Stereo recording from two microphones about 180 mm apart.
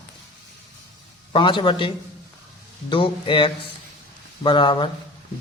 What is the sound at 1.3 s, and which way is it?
A man's voice, 25° left (ahead or behind).